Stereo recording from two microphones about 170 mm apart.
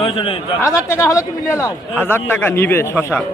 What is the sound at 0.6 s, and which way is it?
Speech, 15° left (ahead or behind).